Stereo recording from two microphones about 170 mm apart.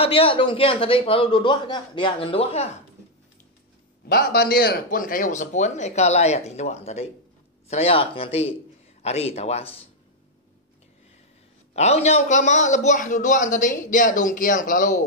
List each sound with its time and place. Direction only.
0.0 s a man's voice: 35° left (ahead or behind)
4.1 s a man's voice: 65° left (ahead or behind); by 9.8 s 35° left (ahead or behind)
11.7 s a man's voice: 40° left (ahead or behind)